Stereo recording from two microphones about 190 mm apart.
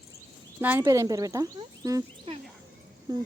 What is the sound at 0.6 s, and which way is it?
Speech, 10° right (ahead or behind).